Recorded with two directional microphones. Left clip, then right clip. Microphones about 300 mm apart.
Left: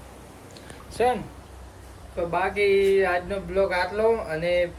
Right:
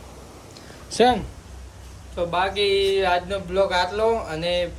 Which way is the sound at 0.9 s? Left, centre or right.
Right.